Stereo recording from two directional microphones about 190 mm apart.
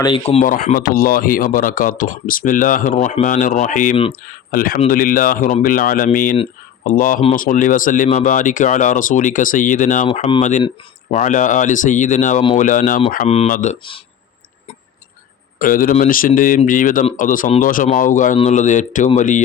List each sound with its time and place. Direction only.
0.0 s speech: 30° left (ahead or behind)
0.4 s speech: 45° left (ahead or behind)
10.1 s speech: 25° left (ahead or behind); by 13.7 s 40° left (ahead or behind)
15.5 s speech: 45° left (ahead or behind)